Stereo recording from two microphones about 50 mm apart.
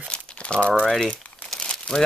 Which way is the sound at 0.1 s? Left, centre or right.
Left.